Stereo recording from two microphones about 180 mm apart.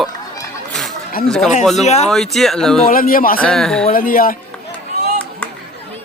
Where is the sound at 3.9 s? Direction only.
50° left (ahead or behind).